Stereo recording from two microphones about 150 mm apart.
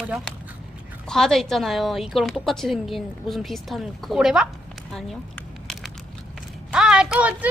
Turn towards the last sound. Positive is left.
turn(degrees=-5)  # may be behind; listen again after turning